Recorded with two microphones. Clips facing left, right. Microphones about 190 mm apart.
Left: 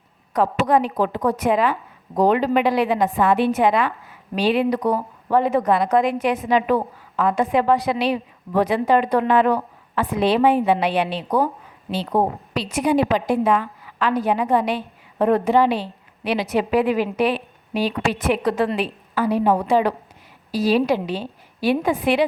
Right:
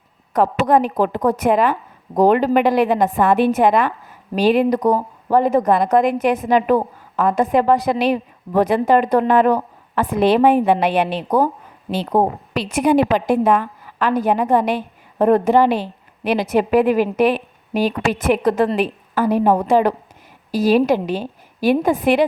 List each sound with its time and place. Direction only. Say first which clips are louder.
0.6 s speech: right 3 dB; 50° right (ahead or behind)